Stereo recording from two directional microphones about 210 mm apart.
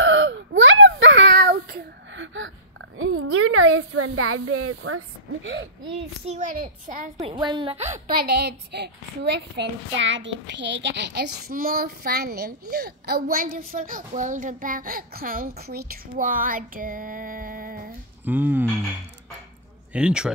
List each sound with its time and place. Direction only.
0.0 s a sound: 65° right (ahead or behind)
3.0 s a woman's voice: 80° right; by 5.9 s 60° right (ahead or behind)
6.2 s a child's voice: 35° right (ahead or behind)
7.2 s speech: 20° right (ahead or behind); by 17.9 s 40° right (ahead or behind)
18.2 s speech: 10° right (ahead or behind)
19.9 s speech: 5° right (ahead or behind)